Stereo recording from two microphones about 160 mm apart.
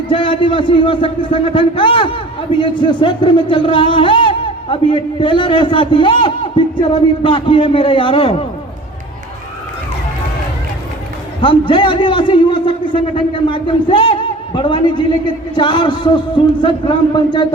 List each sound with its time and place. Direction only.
0.1 s a man's voice: 30° left (ahead or behind)
11.3 s a man's voice: 30° left (ahead or behind)